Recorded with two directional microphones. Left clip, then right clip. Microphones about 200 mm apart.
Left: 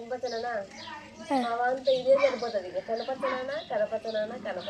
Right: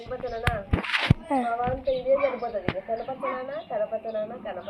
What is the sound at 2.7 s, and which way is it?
Speech, 5° left (ahead or behind).